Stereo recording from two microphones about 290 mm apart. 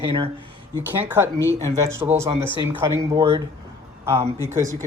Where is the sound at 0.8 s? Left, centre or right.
Centre.